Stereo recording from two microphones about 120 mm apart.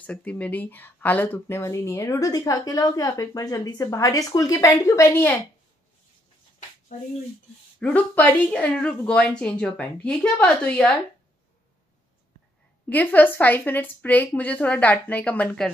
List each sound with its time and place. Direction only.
0.0 s speech: 10° left (ahead or behind)
7.8 s a woman's voice: 15° left (ahead or behind)
12.9 s a woman's voice: 15° left (ahead or behind)